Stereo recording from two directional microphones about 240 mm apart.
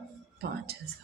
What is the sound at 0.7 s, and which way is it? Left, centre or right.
Speech, right.